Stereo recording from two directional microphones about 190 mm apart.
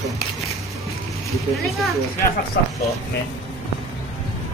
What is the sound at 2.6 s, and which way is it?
Speech, 55° left (ahead or behind).